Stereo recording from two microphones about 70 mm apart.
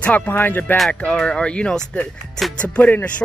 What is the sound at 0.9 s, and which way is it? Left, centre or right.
Speech, centre.